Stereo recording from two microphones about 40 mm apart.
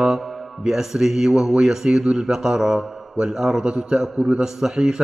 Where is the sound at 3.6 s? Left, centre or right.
Right.